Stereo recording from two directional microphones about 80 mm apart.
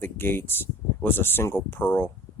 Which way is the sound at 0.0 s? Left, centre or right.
Left.